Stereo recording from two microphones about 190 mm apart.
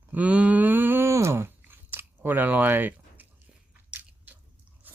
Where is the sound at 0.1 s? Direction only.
5° right (ahead or behind).